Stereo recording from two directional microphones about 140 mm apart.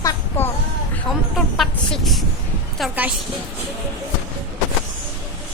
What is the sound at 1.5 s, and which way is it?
Speech, centre (ahead or behind).